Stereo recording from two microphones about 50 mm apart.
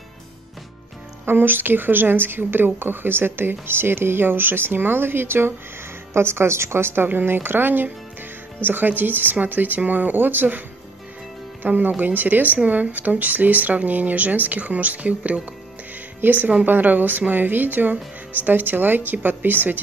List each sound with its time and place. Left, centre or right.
1.2 s speech: right
6.1 s speech: right
11.6 s speech: right
16.2 s speech: right